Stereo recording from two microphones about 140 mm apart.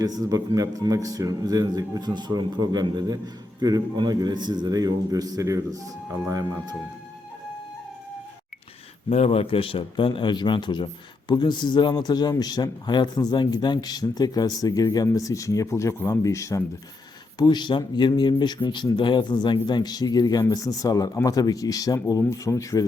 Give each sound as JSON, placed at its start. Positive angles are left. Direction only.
{"t": 0.0, "sound": "speech", "side_deg": -25}
{"t": 9.0, "sound": "a man's voice", "side_deg": 45}